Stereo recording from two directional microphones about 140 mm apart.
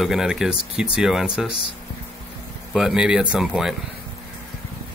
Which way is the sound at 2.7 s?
5° right (ahead or behind).